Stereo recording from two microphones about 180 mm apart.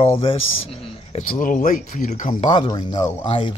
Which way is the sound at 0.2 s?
30° left (ahead or behind).